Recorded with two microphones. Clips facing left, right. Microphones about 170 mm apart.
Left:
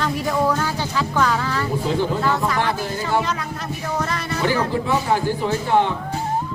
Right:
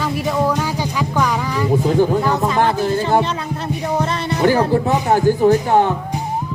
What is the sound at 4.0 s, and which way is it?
Music, 25° right (ahead or behind).